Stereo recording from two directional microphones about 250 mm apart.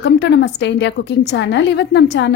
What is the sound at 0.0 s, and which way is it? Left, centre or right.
A woman's voice, left.